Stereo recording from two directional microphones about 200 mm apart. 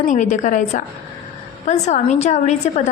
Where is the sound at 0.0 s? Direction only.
40° left (ahead or behind).